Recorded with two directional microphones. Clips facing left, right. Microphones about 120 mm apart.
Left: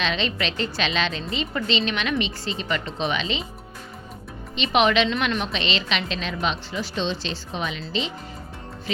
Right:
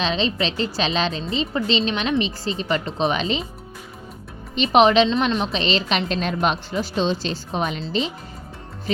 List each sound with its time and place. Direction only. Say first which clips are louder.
0.0 s a woman's voice: right 3 dB; 35° right (ahead or behind)
4.5 s a woman's voice: right 5 dB; 40° right (ahead or behind)